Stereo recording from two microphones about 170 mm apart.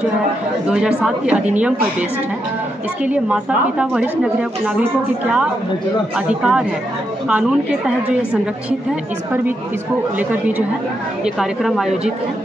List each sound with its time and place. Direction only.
0.7 s a woman's voice: 5° right (ahead or behind)
6.1 s a woman's voice: 5° right (ahead or behind)
11.3 s a woman's voice: centre (ahead or behind)